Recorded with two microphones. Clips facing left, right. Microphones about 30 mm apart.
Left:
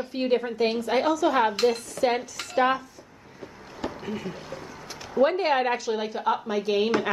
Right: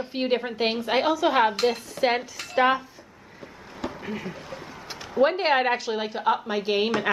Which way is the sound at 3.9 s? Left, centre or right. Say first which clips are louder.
Even; centre.